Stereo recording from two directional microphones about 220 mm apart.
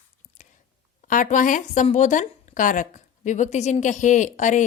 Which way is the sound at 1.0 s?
35° left (ahead or behind).